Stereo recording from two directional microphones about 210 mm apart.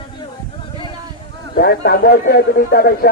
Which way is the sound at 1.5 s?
45° left (ahead or behind).